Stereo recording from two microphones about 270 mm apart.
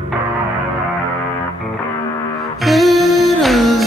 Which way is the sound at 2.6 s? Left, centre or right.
Centre.